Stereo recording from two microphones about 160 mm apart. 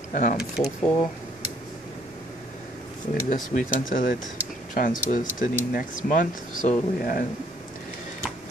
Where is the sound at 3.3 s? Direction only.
55° left (ahead or behind).